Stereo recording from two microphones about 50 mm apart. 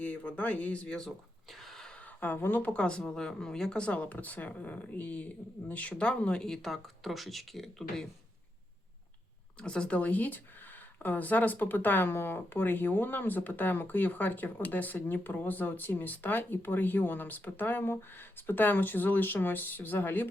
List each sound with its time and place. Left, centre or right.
0.0 s speech: left
1.5 s a sound: centre
1.9 s speech: left
2.7 s speech: centre
6.4 s speech: centre
9.6 s speech: centre; by 20.2 s left